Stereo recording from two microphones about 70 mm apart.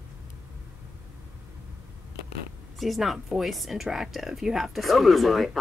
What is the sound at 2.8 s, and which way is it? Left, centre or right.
Speech, centre.